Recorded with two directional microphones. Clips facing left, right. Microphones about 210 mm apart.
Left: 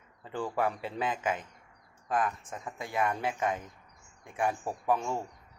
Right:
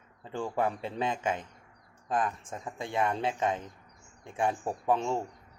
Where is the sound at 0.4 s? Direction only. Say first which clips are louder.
Right 1 dB; 20° right (ahead or behind).